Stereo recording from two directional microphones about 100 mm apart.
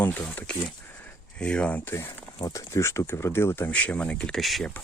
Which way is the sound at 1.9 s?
25° left (ahead or behind).